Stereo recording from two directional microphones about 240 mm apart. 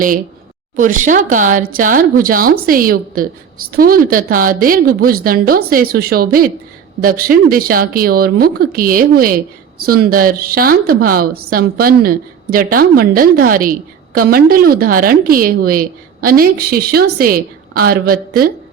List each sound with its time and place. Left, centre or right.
0.8 s a woman's voice: right